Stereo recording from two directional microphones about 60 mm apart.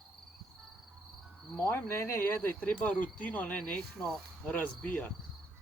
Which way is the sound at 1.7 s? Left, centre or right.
Left.